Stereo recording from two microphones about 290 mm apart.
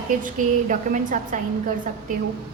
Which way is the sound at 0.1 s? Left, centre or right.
Right.